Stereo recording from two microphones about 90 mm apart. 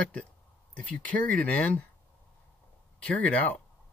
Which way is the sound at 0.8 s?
15° left (ahead or behind).